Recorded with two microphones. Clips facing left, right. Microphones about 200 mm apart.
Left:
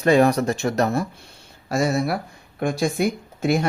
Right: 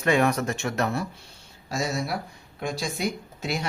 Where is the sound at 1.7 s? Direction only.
60° left (ahead or behind).